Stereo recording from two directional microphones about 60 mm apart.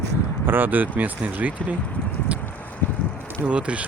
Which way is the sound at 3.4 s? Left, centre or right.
Right.